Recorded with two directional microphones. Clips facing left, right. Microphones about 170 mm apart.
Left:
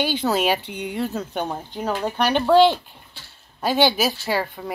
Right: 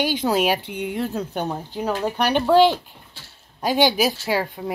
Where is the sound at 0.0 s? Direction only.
10° right (ahead or behind).